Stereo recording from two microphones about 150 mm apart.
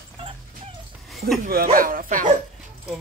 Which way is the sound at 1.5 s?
75° right (ahead or behind).